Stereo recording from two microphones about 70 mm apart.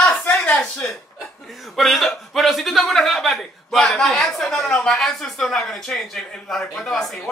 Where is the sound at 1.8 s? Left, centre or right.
Centre.